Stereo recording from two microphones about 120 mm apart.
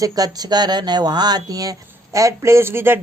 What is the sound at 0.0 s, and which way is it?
A man's voice, 30° right (ahead or behind).